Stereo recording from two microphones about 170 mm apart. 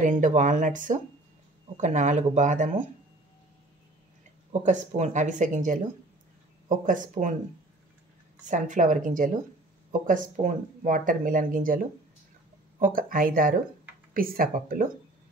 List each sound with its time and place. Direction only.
0.0 s speech: 50° right (ahead or behind)
4.5 s speech: 45° right (ahead or behind)
8.5 s speech: 45° right (ahead or behind)